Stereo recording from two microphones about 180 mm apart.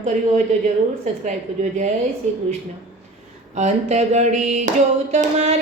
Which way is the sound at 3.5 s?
40° right (ahead or behind).